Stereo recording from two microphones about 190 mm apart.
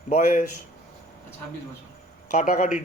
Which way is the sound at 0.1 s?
40° left (ahead or behind).